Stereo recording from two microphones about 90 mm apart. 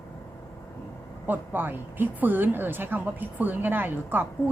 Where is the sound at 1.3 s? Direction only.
20° right (ahead or behind).